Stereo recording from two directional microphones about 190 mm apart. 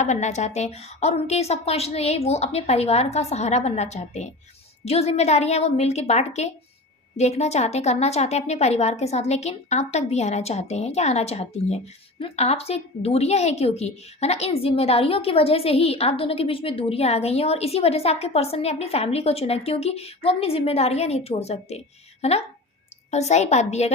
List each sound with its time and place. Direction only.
0.0 s a woman's voice: 40° left (ahead or behind)